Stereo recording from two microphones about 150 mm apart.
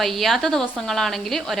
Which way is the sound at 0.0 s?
Centre (ahead or behind).